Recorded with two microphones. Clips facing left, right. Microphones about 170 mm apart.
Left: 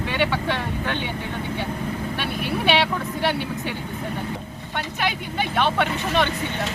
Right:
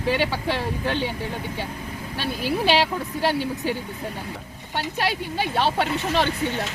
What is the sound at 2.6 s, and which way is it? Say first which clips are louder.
Speech: left 1 dB; 35° right (ahead or behind).